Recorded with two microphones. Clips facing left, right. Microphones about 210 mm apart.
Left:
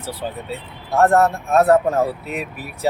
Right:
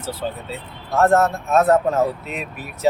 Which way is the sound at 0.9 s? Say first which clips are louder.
Left 1 dB; 35° left (ahead or behind).